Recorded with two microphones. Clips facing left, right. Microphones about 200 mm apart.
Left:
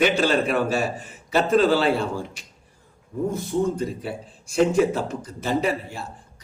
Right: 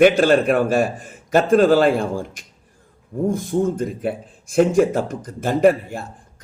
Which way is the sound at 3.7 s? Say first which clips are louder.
Right 4 dB; 50° right (ahead or behind).